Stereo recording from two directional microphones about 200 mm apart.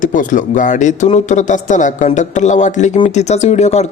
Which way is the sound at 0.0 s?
40° left (ahead or behind).